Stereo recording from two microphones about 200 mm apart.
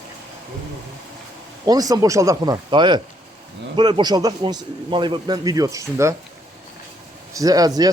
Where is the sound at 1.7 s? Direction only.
20° right (ahead or behind).